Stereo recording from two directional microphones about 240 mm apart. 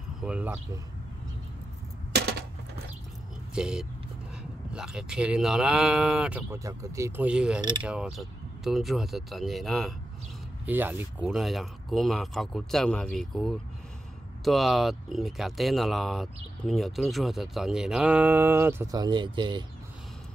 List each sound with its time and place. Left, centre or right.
0.2 s speech: centre
2.1 s coin: right
3.5 s speech: centre